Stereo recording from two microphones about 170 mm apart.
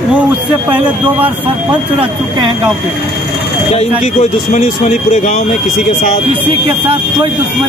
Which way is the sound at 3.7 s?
40° left (ahead or behind).